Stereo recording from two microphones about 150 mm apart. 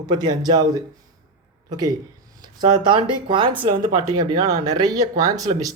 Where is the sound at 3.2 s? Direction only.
35° right (ahead or behind).